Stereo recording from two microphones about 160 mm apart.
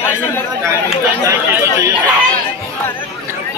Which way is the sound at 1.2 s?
20° right (ahead or behind).